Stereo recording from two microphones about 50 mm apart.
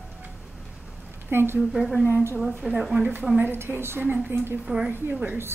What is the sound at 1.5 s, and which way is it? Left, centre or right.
Speech, centre.